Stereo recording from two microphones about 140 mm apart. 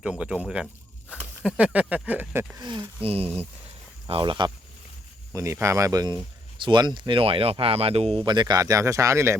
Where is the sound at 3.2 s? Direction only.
15° right (ahead or behind).